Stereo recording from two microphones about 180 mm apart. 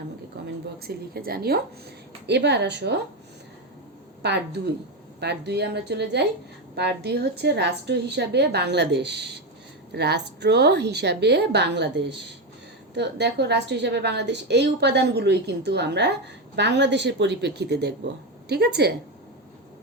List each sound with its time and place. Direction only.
0.4 s a woman's voice: 60° right (ahead or behind)
2.2 s a woman's voice: 70° right (ahead or behind)
4.2 s a woman's voice: 65° right (ahead or behind)